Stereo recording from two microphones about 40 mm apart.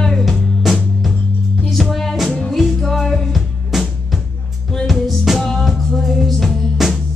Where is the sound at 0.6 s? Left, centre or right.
Centre.